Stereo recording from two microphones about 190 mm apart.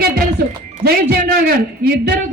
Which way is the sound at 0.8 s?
55° right (ahead or behind).